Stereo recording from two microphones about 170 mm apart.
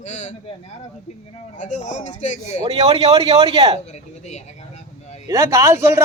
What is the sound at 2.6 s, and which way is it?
Speech, 35° right (ahead or behind).